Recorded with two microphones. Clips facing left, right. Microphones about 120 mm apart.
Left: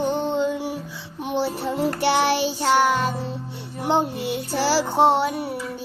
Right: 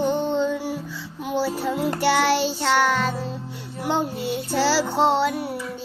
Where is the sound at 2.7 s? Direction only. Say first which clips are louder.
Left 2 dB; 15° left (ahead or behind).